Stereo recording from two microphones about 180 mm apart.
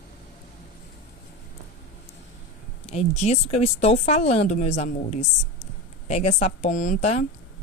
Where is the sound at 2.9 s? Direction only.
35° left (ahead or behind).